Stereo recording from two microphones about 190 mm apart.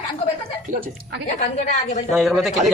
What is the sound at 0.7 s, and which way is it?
Speech, 45° right (ahead or behind).